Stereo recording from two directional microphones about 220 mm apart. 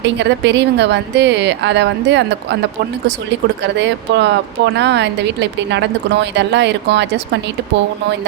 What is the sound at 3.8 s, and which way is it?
A woman's voice, 50° right (ahead or behind).